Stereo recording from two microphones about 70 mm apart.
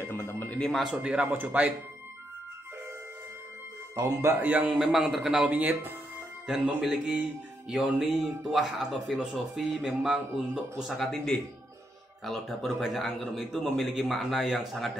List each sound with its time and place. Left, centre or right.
0.0 s a sound: left
0.6 s a man's voice: centre
0.9 s speech: centre
3.9 s speech: right
4.4 s speech: right
4.6 s a man's voice: centre
5.5 s speech: right
6.4 s a man's voice: centre